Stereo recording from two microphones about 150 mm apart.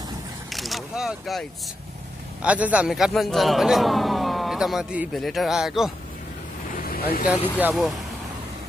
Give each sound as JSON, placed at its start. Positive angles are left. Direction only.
{"t": 0.5, "sound": "vehicle", "side_deg": 0}
{"t": 2.4, "sound": "a man's voice", "side_deg": -10}
{"t": 6.7, "sound": "vehicle", "side_deg": 80}
{"t": 7.2, "sound": "speech", "side_deg": -10}